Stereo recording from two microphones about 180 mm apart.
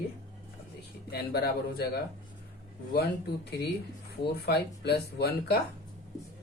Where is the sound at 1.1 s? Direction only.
60° left (ahead or behind).